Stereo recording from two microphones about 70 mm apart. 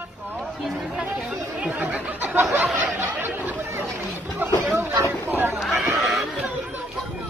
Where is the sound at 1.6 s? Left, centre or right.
Right.